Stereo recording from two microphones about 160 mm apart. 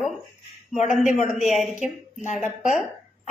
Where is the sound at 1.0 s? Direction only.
50° left (ahead or behind).